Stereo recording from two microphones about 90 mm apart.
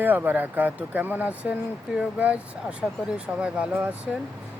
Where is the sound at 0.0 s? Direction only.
20° right (ahead or behind).